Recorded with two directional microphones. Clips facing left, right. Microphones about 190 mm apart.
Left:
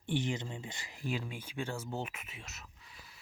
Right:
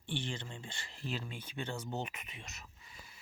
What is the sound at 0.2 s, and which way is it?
Speech, 20° left (ahead or behind).